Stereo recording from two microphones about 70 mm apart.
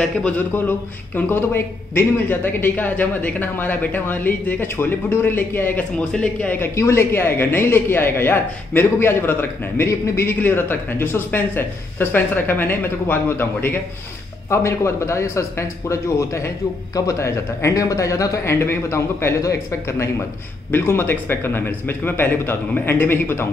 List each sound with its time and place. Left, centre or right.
0.0 s a man's voice: centre
0.4 s a man's voice: left
5.9 s a man's voice: centre
6.6 s a man's voice: left